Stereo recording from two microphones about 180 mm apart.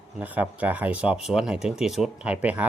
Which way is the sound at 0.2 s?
10° right (ahead or behind).